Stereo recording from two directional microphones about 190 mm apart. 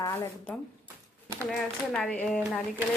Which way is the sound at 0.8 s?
15° right (ahead or behind).